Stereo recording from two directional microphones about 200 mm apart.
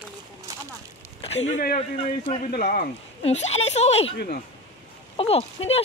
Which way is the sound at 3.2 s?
30° left (ahead or behind).